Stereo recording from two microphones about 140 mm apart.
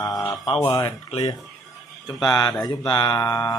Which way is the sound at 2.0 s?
30° left (ahead or behind).